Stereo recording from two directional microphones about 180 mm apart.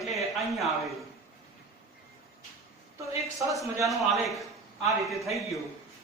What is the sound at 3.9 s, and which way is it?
Speech, centre (ahead or behind).